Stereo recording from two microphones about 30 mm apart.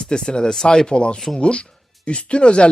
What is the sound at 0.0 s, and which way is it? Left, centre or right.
Speech, left.